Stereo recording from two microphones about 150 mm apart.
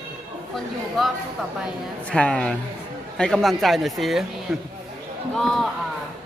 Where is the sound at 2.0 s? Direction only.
5° left (ahead or behind).